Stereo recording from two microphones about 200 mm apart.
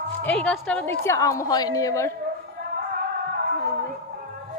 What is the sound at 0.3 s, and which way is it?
Speech, 5° left (ahead or behind).